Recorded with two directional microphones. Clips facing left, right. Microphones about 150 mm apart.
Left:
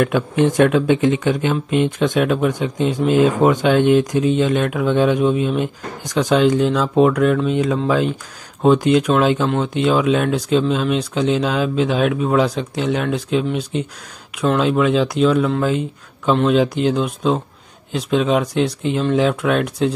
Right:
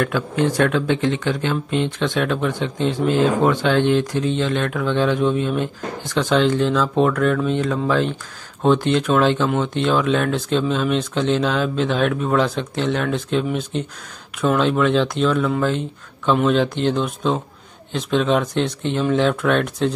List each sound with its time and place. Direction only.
0.0 s speech: 20° left (ahead or behind)
14.6 s speech: 5° left (ahead or behind)